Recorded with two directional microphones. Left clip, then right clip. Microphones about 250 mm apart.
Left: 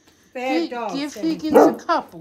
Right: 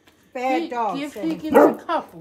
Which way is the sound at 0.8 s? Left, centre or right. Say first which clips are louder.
Right 1 dB; centre.